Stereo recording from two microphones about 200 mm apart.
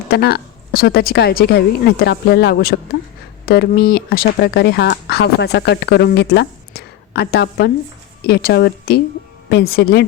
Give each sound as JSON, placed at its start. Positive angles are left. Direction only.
{"t": 0.1, "sound": "speech", "side_deg": 50}